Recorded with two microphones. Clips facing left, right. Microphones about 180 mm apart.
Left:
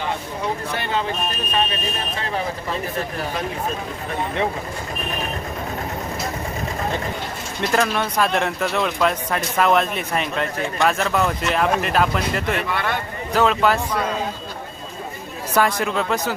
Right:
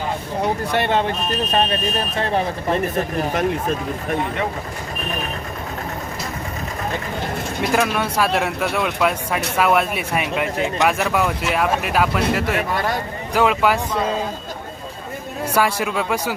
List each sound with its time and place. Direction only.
7.6 s speech: 5° right (ahead or behind)
12.5 s speech: 40° right (ahead or behind)
13.3 s speech: 10° right (ahead or behind)
15.5 s speech: 10° right (ahead or behind)